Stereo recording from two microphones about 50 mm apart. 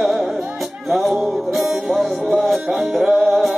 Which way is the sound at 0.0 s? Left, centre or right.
Centre.